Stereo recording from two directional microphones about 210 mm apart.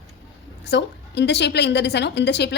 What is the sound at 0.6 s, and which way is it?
A woman's voice, 55° left (ahead or behind).